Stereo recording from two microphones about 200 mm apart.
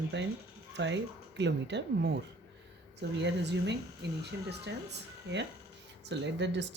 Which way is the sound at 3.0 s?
60° right (ahead or behind).